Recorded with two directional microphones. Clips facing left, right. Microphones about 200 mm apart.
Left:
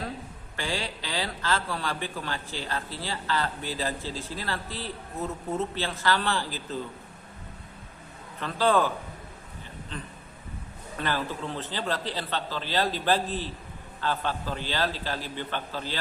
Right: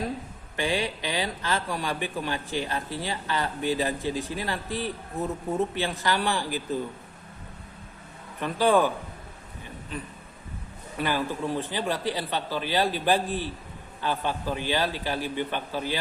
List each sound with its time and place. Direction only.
0.5 s a man's voice: 15° right (ahead or behind)
8.4 s a man's voice: 15° right (ahead or behind)
9.9 s a man's voice: 10° right (ahead or behind)